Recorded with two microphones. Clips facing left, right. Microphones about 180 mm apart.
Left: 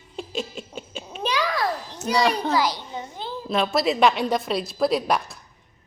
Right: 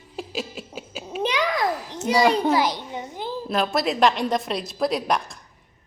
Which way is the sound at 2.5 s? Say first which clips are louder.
Right 1 dB; 20° right (ahead or behind).